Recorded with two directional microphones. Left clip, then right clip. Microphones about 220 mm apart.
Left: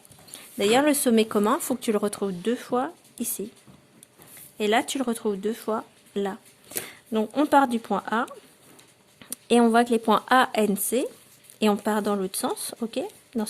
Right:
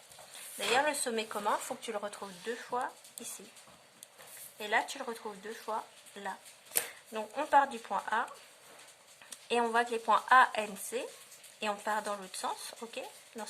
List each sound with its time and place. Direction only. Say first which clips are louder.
0.7 s speech: left 9 dB; 40° left (ahead or behind)
4.5 s speech: left 9 dB; 45° left (ahead or behind)
9.3 s speech: left 10 dB; 40° left (ahead or behind)